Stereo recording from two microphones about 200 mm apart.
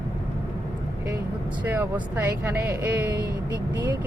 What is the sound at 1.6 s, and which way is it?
Speech, 10° right (ahead or behind).